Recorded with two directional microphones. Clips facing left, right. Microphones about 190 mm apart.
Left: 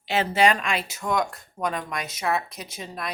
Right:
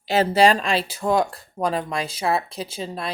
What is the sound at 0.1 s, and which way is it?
Speech, 35° right (ahead or behind).